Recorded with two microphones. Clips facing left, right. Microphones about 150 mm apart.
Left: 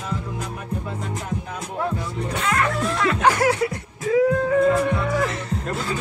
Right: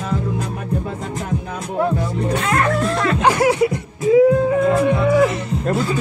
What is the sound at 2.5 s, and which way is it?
Music, 45° right (ahead or behind).